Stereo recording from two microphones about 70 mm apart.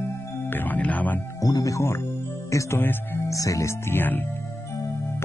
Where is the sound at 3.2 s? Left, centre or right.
Left.